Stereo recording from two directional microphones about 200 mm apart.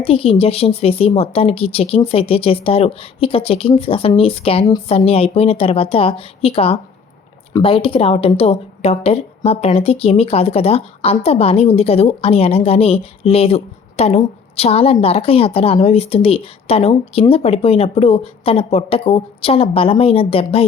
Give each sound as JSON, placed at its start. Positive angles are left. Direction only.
{"t": 0.0, "sound": "a woman's voice", "side_deg": 30}